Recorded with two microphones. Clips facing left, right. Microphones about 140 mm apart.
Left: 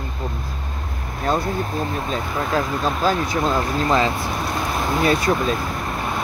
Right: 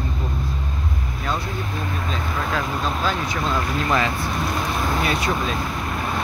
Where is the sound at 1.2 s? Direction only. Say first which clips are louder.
Left 6 dB; 45° left (ahead or behind).